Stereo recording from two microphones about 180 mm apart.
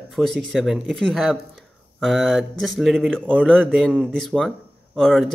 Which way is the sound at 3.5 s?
10° right (ahead or behind).